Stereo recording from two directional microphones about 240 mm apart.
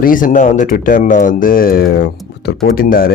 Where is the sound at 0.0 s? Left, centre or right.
Left.